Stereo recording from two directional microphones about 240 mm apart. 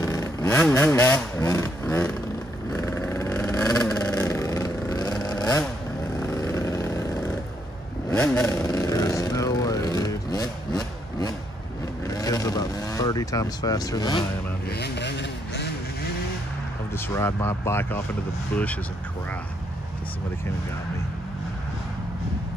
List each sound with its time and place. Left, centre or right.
0.0 s speech: centre
2.7 s vehicle: centre
14.7 s vehicle: left
16.9 s speech: centre